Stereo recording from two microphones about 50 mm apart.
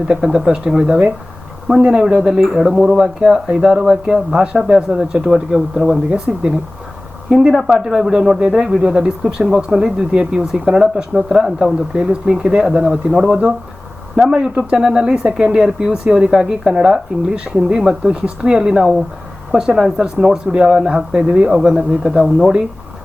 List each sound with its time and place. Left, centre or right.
0.1 s speech: centre
7.3 s speech: centre
22.2 s speech: centre